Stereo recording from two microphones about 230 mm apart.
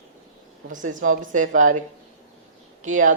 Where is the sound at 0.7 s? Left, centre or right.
Right.